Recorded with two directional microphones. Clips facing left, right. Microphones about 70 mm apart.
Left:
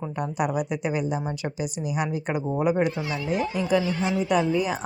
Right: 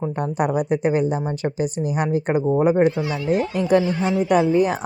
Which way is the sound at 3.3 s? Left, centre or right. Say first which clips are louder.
Right 5 dB; right.